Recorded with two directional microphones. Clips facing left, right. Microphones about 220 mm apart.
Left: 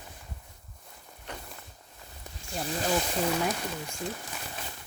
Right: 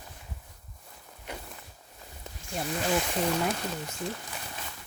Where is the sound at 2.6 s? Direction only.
35° left (ahead or behind).